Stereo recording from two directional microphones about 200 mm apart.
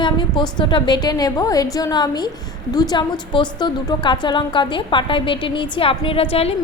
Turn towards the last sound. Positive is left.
turn(degrees=30)  # may be behind; listen again after turning